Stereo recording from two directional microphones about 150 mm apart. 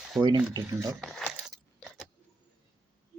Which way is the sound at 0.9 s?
Centre (ahead or behind).